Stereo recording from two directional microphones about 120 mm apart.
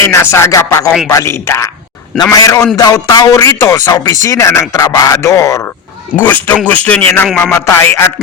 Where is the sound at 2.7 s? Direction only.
30° left (ahead or behind).